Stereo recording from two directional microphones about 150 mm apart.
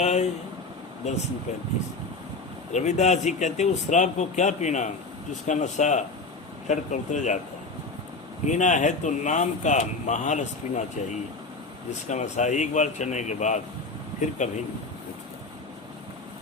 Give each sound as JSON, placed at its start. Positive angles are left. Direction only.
{"t": 0.0, "sound": "vehicle", "side_deg": 50}
{"t": 2.7, "sound": "speech", "side_deg": 50}
{"t": 8.4, "sound": "speech", "side_deg": 55}